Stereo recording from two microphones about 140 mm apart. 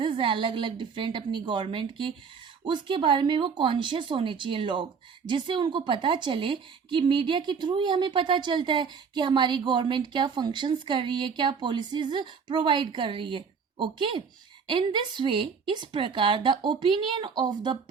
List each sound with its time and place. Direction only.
0.0 s a woman's voice: 40° right (ahead or behind)